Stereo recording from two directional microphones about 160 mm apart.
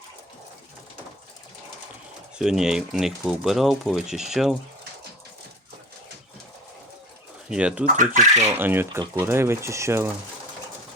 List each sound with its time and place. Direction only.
2.4 s speech: 5° right (ahead or behind)
7.5 s speech: 5° right (ahead or behind)
7.9 s speech: 50° right (ahead or behind)
8.4 s speech: 15° right (ahead or behind)